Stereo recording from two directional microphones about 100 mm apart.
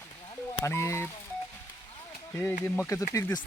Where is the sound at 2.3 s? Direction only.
25° left (ahead or behind).